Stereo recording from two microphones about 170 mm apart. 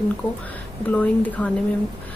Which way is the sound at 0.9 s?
10° left (ahead or behind).